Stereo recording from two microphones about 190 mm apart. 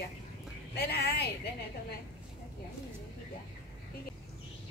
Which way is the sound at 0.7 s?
55° left (ahead or behind).